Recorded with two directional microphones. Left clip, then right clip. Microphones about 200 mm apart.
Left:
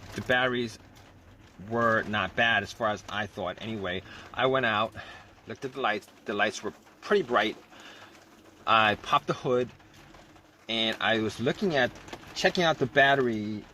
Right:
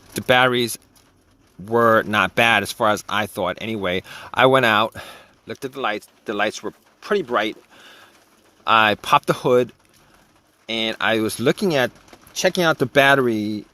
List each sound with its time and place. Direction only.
0.2 s speech: 55° right (ahead or behind)
1.7 s speech: 55° right (ahead or behind)
8.6 s speech: 55° right (ahead or behind)
10.7 s speech: 55° right (ahead or behind)